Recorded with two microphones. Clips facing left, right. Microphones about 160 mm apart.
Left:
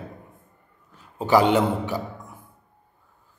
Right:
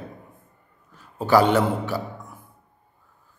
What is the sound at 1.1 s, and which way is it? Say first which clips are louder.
Speech: right 1 dB; 15° left (ahead or behind).